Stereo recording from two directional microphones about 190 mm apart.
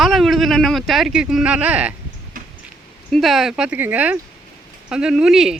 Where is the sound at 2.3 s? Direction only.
45° right (ahead or behind).